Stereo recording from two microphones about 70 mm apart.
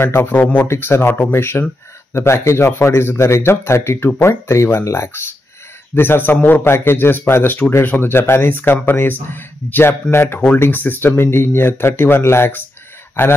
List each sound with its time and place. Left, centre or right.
0.0 s speech: left